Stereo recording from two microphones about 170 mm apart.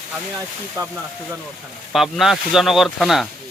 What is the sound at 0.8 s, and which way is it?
Speech, 20° right (ahead or behind).